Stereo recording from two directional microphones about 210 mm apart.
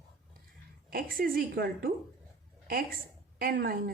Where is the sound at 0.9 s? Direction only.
45° right (ahead or behind).